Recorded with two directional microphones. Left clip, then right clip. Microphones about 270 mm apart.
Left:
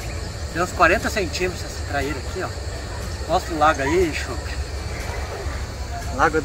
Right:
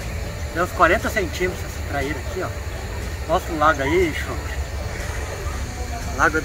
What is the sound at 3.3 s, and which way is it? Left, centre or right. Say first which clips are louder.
Speech: even; centre.